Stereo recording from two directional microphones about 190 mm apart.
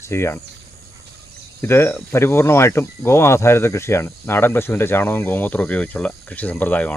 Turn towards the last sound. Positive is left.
turn(degrees=10)  # may be behind; listen again after turning